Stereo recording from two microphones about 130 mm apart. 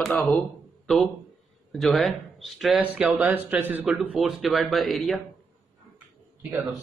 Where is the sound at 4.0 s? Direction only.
Centre (ahead or behind).